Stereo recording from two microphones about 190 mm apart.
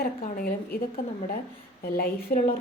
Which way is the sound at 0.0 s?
50° left (ahead or behind).